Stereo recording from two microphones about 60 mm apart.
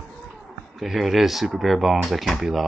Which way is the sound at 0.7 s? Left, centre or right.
Centre.